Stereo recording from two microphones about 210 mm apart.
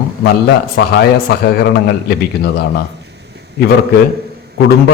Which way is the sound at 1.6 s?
50° left (ahead or behind).